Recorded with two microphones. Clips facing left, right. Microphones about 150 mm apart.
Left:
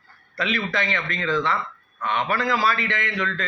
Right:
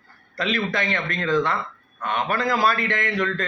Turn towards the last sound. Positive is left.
turn(degrees=-45)  # may be behind; listen again after turning